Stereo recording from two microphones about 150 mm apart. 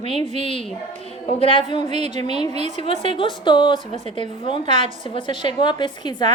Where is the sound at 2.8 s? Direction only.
40° left (ahead or behind).